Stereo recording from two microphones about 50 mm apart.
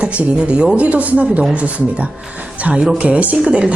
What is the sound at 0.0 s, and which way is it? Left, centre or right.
A woman's voice, right.